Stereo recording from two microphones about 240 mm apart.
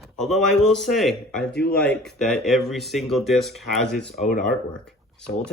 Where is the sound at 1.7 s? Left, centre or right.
Centre.